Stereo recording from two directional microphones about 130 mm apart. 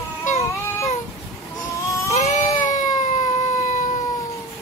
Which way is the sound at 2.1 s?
65° left (ahead or behind).